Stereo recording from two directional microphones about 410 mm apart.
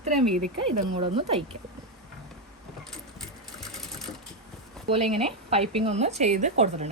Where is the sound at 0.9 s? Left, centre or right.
Centre.